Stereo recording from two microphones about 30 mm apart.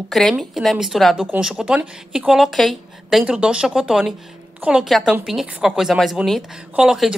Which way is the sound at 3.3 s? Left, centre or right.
Right.